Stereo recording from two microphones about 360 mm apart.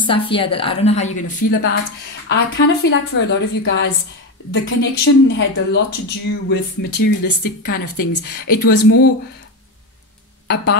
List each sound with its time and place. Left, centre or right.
0.0 s a woman's voice: centre
10.5 s speech: left